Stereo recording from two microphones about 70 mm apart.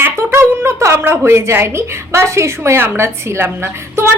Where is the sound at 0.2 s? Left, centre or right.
Right.